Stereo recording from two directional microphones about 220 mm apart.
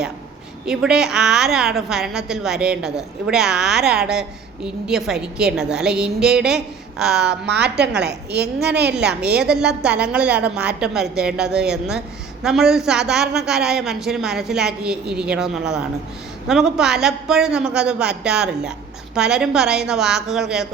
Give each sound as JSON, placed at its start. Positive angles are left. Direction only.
{"t": 0.6, "sound": "a woman's voice", "side_deg": 0}
{"t": 7.4, "sound": "a woman's voice", "side_deg": -50}
{"t": 9.0, "sound": "a woman's voice", "side_deg": -5}